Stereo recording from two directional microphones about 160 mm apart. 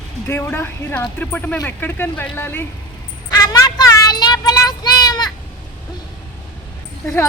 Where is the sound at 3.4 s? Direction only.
25° left (ahead or behind).